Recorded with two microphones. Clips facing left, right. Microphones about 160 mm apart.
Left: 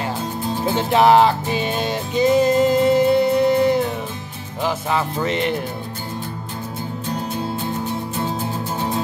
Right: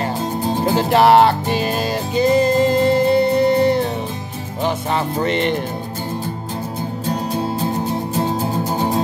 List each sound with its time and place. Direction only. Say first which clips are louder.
0.7 s music: right 1 dB; centre (ahead or behind)
5.2 s music: right 3 dB; 5° left (ahead or behind)
8.2 s music: right 6 dB; 40° right (ahead or behind)